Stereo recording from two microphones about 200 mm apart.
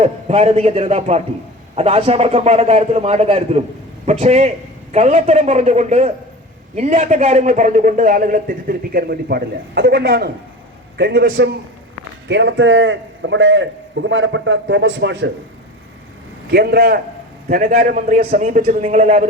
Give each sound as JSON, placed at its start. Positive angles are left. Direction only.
{"t": 0.0, "sound": "a man's voice", "side_deg": -30}
{"t": 12.3, "sound": "a man's voice", "side_deg": -65}
{"t": 16.5, "sound": "a man's voice", "side_deg": -55}